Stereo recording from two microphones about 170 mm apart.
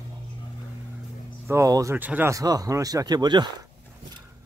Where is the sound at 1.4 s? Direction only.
15° right (ahead or behind).